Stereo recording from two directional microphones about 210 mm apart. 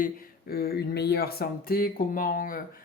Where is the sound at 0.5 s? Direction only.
45° left (ahead or behind).